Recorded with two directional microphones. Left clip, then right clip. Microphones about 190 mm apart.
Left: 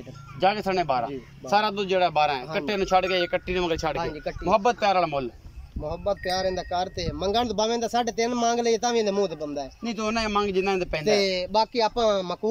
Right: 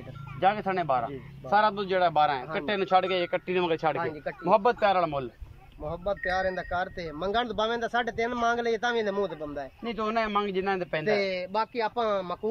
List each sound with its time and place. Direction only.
0.4 s a man's voice: 5° left (ahead or behind)
4.0 s speech: 15° left (ahead or behind)
4.5 s a man's voice: centre (ahead or behind)
11.1 s speech: 15° left (ahead or behind)